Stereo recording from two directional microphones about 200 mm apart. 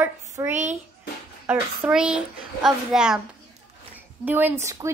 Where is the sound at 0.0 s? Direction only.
10° right (ahead or behind).